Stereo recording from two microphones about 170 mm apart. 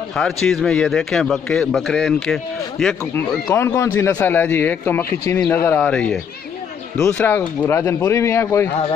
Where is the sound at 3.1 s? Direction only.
15° left (ahead or behind).